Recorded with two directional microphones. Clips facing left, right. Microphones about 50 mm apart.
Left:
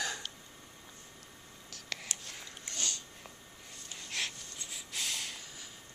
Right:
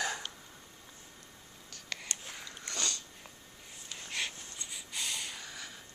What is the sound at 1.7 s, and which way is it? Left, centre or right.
Whispering, centre.